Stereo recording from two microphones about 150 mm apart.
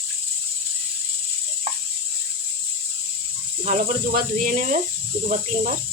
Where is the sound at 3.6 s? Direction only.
65° right (ahead or behind).